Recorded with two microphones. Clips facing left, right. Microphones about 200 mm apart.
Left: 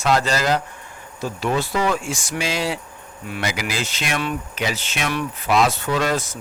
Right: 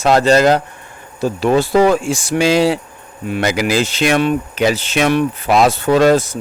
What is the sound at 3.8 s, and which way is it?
Speech, 30° right (ahead or behind).